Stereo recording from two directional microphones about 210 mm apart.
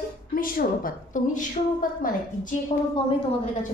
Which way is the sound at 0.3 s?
40° left (ahead or behind).